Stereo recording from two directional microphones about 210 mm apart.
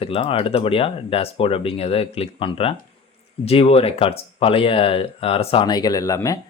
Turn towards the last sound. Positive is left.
turn(degrees=15)  # may be behind; listen again after turning